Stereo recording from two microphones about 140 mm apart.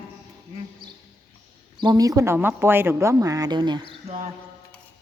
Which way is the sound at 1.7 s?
30° right (ahead or behind).